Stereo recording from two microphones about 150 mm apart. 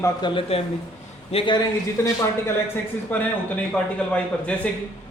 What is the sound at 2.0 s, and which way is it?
Speech, 15° left (ahead or behind).